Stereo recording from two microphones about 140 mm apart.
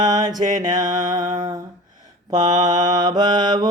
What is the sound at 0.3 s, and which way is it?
Mantra, 70° right (ahead or behind).